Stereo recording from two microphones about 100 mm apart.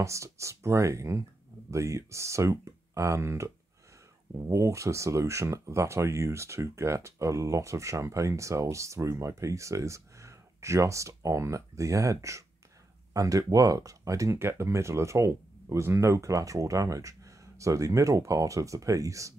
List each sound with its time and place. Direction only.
0.0 s speech: 30° right (ahead or behind)